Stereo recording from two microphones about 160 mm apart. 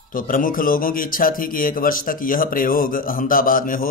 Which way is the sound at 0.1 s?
60° left (ahead or behind).